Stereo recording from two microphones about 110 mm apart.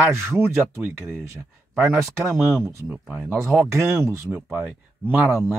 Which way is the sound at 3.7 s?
25° right (ahead or behind).